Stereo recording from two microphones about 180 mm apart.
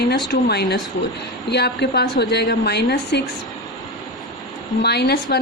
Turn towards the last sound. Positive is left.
turn(degrees=60)  # may be behind; listen again after turning